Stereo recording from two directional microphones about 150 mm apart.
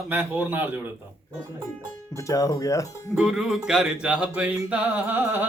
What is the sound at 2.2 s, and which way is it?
Speech, 20° left (ahead or behind).